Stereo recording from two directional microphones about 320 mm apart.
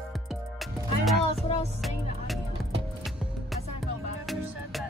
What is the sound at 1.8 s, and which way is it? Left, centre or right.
Music, centre.